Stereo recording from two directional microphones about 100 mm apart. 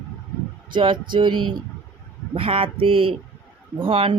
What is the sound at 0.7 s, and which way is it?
Speech, 50° right (ahead or behind).